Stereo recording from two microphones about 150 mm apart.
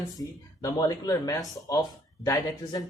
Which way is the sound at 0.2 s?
25° left (ahead or behind).